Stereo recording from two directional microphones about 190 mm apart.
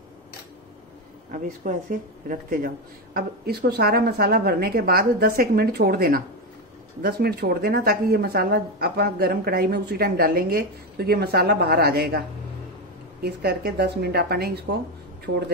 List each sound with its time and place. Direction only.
1.3 s a woman's voice: 45° right (ahead or behind)
13.2 s speech: 55° right (ahead or behind)
15.3 s speech: 70° right (ahead or behind)